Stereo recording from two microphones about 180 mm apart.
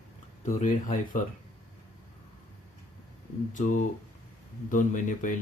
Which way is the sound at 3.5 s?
45° left (ahead or behind).